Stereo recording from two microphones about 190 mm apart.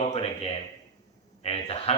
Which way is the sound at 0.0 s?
30° left (ahead or behind).